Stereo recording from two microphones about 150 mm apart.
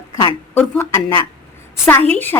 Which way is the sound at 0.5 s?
15° left (ahead or behind).